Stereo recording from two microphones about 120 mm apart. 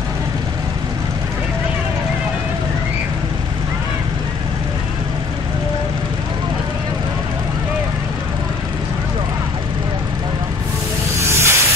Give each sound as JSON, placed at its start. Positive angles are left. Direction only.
{"t": 11.1, "sound": "snake", "side_deg": -20}